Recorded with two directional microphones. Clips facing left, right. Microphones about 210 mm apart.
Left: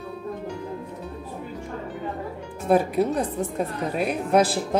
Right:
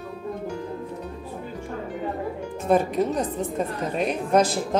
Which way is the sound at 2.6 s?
5° left (ahead or behind).